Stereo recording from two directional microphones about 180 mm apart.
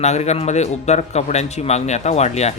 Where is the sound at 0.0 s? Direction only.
40° left (ahead or behind).